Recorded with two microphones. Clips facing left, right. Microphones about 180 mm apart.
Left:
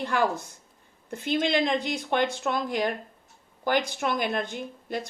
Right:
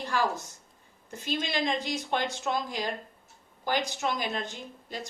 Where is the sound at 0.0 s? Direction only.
60° left (ahead or behind).